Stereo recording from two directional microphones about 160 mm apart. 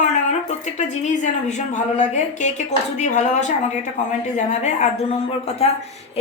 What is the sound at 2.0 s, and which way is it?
Speech, 50° left (ahead or behind).